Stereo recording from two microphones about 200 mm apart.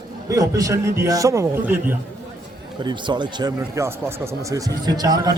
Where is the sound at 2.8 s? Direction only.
20° right (ahead or behind).